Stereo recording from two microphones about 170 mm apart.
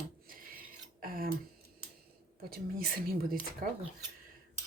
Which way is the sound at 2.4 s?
60° right (ahead or behind).